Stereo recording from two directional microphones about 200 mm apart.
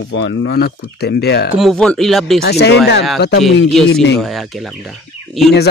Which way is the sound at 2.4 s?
55° left (ahead or behind).